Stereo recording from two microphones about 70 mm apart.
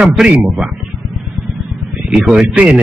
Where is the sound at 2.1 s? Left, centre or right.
Centre.